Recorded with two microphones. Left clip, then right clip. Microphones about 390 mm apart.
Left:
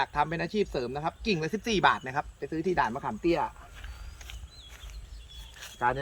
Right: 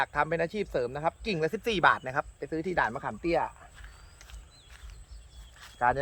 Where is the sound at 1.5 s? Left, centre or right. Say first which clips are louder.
Right 1 dB; centre.